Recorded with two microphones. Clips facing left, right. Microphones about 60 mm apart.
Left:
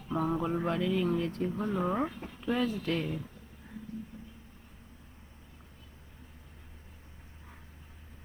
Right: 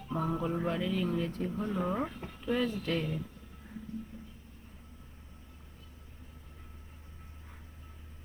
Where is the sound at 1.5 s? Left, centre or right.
Left.